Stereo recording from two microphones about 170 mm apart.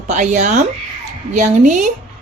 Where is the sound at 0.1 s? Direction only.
45° right (ahead or behind).